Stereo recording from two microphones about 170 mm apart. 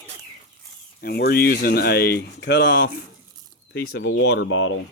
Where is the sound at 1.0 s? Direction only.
70° left (ahead or behind).